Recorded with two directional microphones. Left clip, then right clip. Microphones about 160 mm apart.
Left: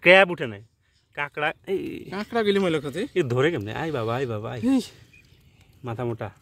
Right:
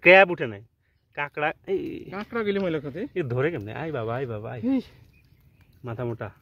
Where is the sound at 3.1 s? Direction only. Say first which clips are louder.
Left 4 dB; 35° left (ahead or behind).